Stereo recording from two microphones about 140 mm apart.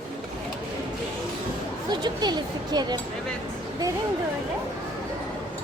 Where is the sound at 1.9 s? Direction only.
30° right (ahead or behind).